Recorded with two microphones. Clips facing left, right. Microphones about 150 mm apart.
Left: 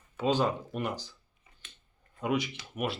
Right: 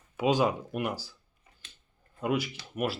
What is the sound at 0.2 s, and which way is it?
Speech, 10° right (ahead or behind).